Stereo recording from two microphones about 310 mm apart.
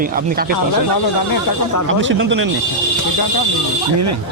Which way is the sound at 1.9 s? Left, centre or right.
Right.